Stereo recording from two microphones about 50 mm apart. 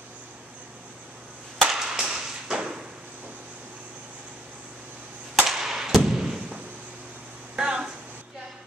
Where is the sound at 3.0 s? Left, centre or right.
Right.